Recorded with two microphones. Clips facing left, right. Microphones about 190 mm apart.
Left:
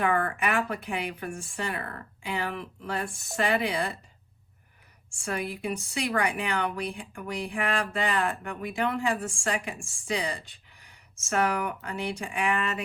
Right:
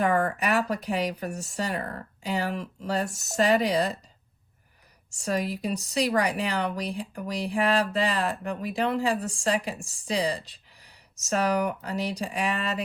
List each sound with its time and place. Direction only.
0.0 s speech: 40° right (ahead or behind)
5.1 s speech: 40° right (ahead or behind)